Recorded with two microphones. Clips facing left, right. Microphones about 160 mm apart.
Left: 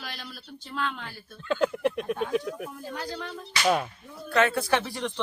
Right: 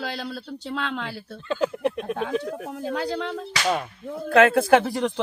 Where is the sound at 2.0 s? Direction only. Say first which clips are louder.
Right 1 dB; 70° right (ahead or behind).